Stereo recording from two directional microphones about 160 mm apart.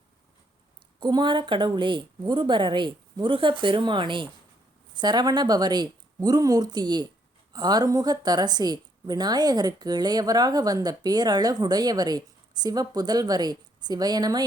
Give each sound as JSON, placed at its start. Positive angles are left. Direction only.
{"t": 0.9, "sound": "a woman's voice", "side_deg": -25}